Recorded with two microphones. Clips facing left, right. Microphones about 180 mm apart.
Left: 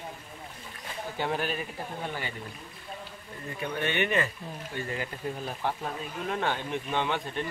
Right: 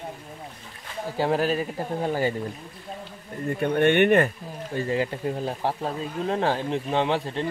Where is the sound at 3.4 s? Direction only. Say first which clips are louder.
Right 11 dB; 55° right (ahead or behind).